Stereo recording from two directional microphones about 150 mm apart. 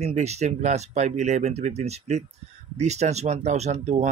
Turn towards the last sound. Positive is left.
turn(degrees=-50)  # may be behind; listen again after turning